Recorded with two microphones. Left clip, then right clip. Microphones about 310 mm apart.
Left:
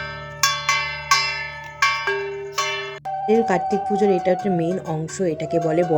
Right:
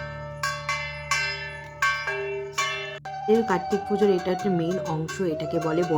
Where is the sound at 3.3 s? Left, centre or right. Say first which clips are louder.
Left 3 dB; centre.